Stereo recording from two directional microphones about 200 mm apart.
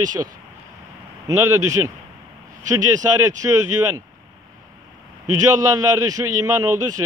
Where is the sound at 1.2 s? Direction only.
15° right (ahead or behind).